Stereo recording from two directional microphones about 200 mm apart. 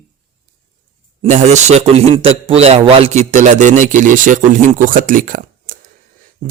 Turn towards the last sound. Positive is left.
turn(degrees=-45)  # may be behind; listen again after turning